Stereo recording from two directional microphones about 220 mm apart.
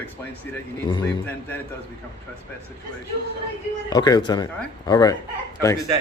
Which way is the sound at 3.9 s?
15° left (ahead or behind).